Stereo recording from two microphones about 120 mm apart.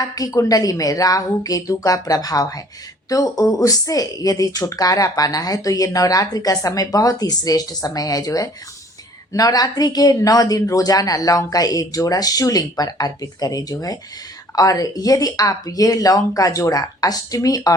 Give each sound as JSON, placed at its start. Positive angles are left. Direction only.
{"t": 0.0, "sound": "speech", "side_deg": 30}